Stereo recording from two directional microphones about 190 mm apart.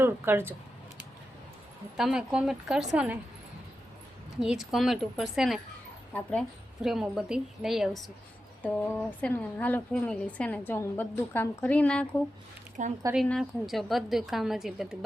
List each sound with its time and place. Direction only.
0.0 s speech: 10° right (ahead or behind)
2.0 s a woman's voice: 5° right (ahead or behind)
4.4 s a woman's voice: centre (ahead or behind)
6.8 s a woman's voice: centre (ahead or behind)
12.8 s speech: 40° right (ahead or behind)
13.1 s a woman's voice: centre (ahead or behind)